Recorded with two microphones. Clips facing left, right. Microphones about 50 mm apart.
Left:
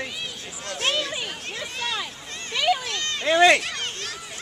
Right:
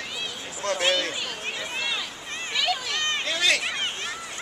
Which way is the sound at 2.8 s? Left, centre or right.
Centre.